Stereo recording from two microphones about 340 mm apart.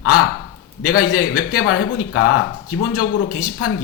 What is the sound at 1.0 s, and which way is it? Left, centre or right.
Speech, left.